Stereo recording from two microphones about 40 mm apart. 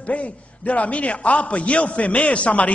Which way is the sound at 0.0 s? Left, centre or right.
Left.